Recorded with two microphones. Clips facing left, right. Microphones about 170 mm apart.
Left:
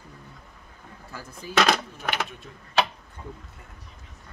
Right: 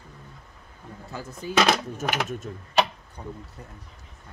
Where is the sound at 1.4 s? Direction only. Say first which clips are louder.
Right 1 dB; 20° right (ahead or behind).